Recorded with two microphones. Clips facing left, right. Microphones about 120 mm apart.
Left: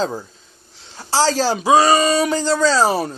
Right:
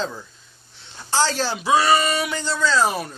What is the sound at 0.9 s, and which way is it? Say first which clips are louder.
Speech: left 4 dB; 35° left (ahead or behind).